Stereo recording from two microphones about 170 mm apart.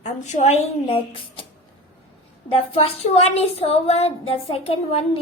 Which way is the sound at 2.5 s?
35° left (ahead or behind).